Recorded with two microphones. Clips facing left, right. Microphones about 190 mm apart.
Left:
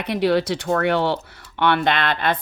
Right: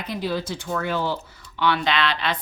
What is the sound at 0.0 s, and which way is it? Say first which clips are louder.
Speech: left 8 dB; 70° left (ahead or behind).